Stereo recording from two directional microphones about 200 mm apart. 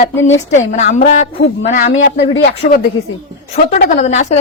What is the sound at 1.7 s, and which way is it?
A woman's voice, 45° left (ahead or behind).